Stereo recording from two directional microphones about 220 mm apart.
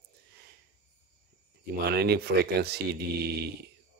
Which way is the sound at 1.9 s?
45° right (ahead or behind).